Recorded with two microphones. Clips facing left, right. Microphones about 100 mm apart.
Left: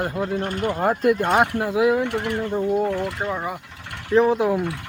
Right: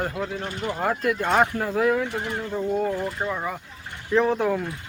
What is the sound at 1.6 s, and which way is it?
Speech, 10° left (ahead or behind).